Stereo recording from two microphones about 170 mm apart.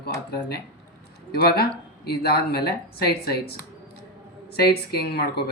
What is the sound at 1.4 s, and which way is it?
Speech, 65° left (ahead or behind).